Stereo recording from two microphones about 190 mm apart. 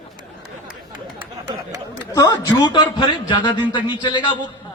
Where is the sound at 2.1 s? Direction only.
20° left (ahead or behind).